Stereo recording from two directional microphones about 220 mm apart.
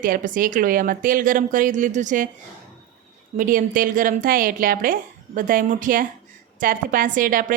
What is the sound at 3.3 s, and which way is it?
A woman's voice, 40° right (ahead or behind).